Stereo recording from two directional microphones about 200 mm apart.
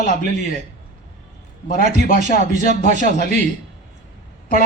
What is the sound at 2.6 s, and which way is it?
Speech, 40° right (ahead or behind).